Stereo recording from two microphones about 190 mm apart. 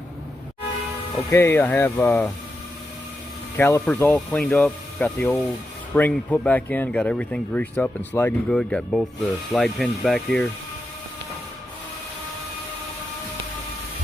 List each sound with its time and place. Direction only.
1.1 s speech: 15° left (ahead or behind)
3.5 s speech: 15° left (ahead or behind)